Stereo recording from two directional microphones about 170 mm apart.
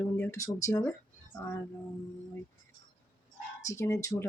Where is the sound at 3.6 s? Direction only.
15° left (ahead or behind).